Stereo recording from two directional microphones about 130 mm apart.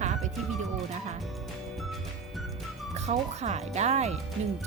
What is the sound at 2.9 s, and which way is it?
A woman's voice, 60° right (ahead or behind).